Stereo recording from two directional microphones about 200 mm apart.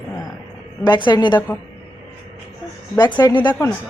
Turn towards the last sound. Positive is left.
turn(degrees=20)  # may be behind; listen again after turning